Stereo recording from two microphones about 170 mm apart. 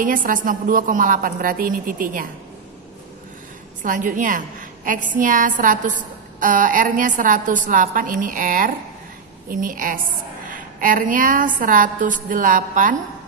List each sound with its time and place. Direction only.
0.0 s a woman's voice: 50° right (ahead or behind)
3.8 s a woman's voice: 50° right (ahead or behind)